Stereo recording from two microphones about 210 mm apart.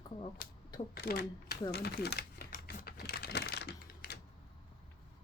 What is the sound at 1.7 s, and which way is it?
Typewriter, 50° left (ahead or behind).